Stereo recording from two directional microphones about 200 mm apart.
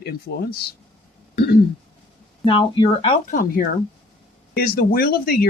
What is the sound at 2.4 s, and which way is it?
Speech, 25° left (ahead or behind).